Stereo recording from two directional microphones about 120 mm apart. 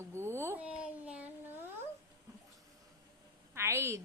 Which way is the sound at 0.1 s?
20° right (ahead or behind).